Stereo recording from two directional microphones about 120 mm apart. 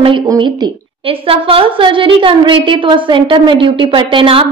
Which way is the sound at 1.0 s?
50° right (ahead or behind).